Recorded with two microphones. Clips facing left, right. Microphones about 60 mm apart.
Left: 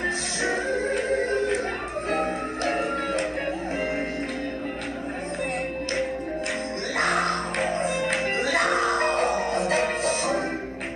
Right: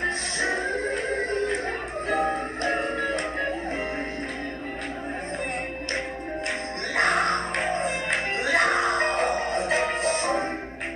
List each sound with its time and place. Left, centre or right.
0.4 s music: right
7.0 s music: right